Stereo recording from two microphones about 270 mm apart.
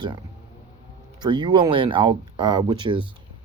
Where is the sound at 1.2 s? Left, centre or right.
Centre.